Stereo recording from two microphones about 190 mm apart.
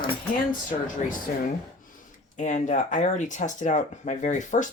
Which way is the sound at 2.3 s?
40° left (ahead or behind).